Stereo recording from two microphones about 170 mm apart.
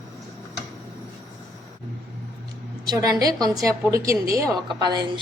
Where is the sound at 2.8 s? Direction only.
20° right (ahead or behind).